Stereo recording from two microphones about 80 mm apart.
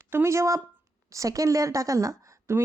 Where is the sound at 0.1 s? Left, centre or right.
Right.